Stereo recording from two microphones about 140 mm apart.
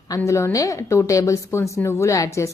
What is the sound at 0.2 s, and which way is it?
A woman's voice, 20° left (ahead or behind).